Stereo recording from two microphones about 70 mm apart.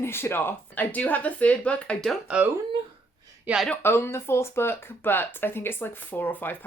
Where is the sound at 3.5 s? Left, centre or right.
Right.